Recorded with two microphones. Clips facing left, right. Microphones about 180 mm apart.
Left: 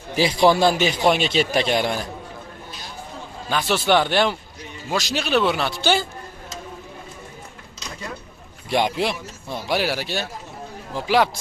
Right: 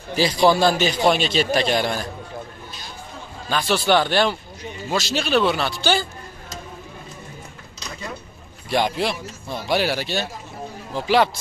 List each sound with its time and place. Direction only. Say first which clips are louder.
0.1 s a man's voice: even; 20° left (ahead or behind)
3.4 s speech: even; 15° left (ahead or behind)
8.6 s speech: even; 20° left (ahead or behind)